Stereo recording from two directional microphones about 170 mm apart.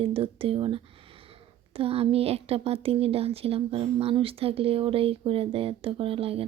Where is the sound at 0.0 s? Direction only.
35° right (ahead or behind).